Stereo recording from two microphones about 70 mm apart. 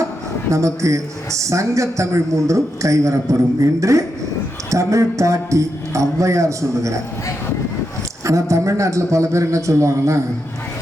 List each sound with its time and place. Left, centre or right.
0.5 s a man's voice: right
8.2 s a man's voice: right